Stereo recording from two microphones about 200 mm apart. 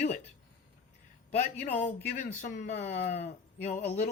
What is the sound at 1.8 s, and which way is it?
Speech, 35° left (ahead or behind).